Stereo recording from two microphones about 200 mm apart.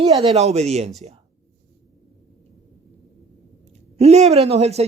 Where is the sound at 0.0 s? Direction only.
30° right (ahead or behind).